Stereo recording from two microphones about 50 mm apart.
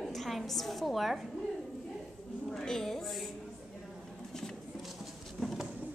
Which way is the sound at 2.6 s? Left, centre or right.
Centre.